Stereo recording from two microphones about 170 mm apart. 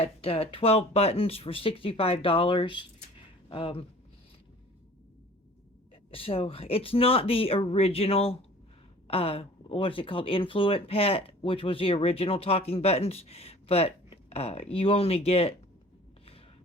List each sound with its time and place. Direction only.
0.0 s speech: 35° left (ahead or behind)
6.1 s speech: 35° left (ahead or behind)